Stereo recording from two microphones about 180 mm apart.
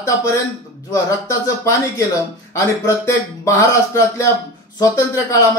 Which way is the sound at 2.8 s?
15° left (ahead or behind).